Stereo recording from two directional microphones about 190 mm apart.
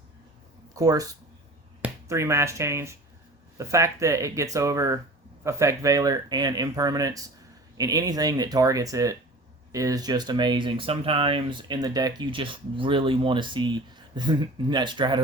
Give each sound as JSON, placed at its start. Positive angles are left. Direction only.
{"t": 0.8, "sound": "speech", "side_deg": -20}